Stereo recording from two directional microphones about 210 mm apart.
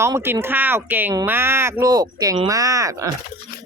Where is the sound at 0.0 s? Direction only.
10° right (ahead or behind).